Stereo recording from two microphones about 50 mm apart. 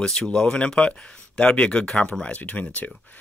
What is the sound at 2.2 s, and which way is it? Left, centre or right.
Speech, left.